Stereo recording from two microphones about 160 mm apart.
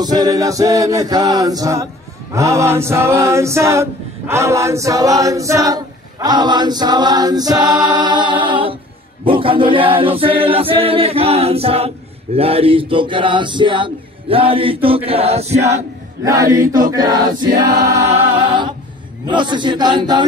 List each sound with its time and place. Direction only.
0.0 s chant: 25° right (ahead or behind); by 15.8 s 40° right (ahead or behind)
16.3 s chant: 25° right (ahead or behind)
19.2 s chant: 30° right (ahead or behind)